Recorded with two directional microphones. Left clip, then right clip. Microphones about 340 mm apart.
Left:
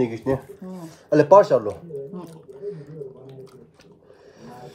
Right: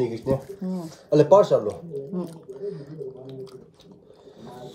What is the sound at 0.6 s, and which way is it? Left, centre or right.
Speech, right.